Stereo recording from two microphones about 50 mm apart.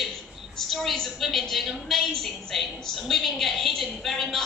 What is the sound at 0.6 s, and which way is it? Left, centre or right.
Speech, centre.